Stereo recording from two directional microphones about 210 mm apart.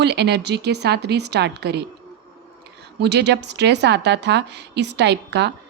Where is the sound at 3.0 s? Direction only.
55° right (ahead or behind).